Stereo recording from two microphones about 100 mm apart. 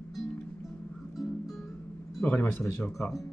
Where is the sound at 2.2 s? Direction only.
15° left (ahead or behind).